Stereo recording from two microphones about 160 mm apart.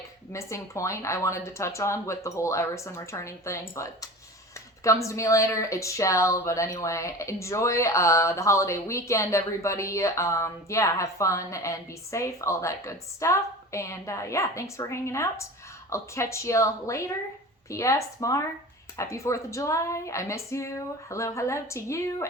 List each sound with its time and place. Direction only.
0.3 s speech: 20° left (ahead or behind)